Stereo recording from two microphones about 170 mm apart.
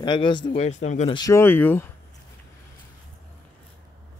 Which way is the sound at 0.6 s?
45° left (ahead or behind).